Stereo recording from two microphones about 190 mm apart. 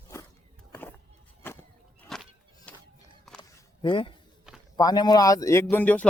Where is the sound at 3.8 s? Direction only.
25° left (ahead or behind); by 6.0 s 10° left (ahead or behind).